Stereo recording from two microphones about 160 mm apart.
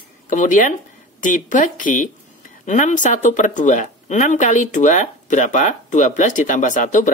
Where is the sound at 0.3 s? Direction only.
55° left (ahead or behind).